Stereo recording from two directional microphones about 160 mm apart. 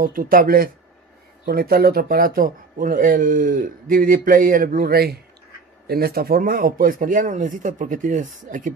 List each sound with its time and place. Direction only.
0.0 s speech: 60° right (ahead or behind)